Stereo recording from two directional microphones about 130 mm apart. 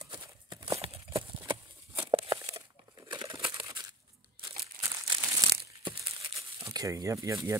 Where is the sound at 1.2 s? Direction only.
35° right (ahead or behind).